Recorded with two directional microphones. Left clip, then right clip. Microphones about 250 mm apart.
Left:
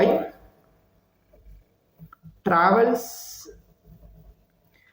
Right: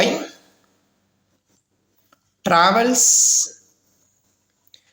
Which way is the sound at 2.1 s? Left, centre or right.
Right.